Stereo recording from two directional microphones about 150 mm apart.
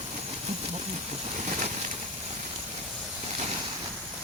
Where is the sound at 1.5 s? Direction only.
50° right (ahead or behind).